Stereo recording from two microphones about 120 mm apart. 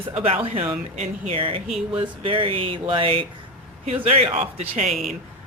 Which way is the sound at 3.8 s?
65° right (ahead or behind).